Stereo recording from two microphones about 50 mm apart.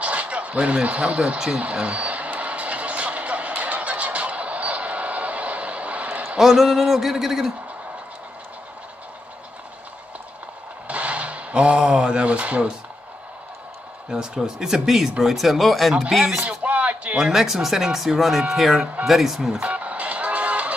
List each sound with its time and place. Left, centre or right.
0.0 s speech: right
1.6 s music: right
6.3 s speech: centre
10.9 s a sound: right
14.0 s speech: centre
16.4 s a sound: right
17.2 s speech: centre
19.6 s music: right